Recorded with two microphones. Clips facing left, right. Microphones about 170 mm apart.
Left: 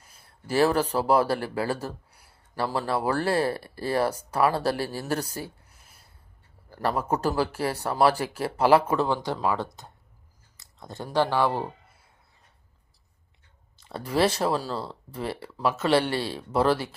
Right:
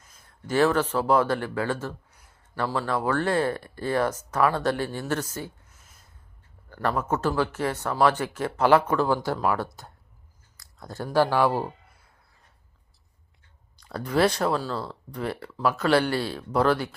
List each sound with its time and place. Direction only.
0.0 s a sound: 30° left (ahead or behind)
1.1 s speech: 35° left (ahead or behind)
2.2 s a sound: 35° left (ahead or behind)
2.7 s speech: 30° left (ahead or behind)
4.9 s a sound: 35° left (ahead or behind)
6.7 s a man's voice: 20° left (ahead or behind)
7.0 s speech: 35° left (ahead or behind); by 9.4 s 20° left (ahead or behind)
11.1 s speech: 10° right (ahead or behind)
13.7 s a man's voice: 25° left (ahead or behind)
15.4 s speech: 5° left (ahead or behind)
15.9 s a man's voice: 30° left (ahead or behind)